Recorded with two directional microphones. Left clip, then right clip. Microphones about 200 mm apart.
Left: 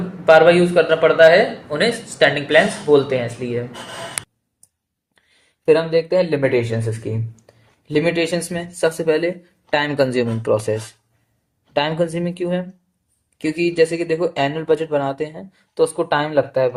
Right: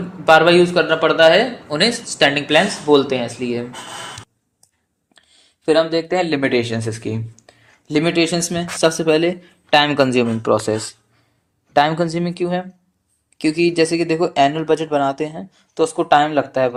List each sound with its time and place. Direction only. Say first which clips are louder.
0.3 s speech: even; 50° right (ahead or behind)
5.6 s speech: left 1 dB; 40° right (ahead or behind)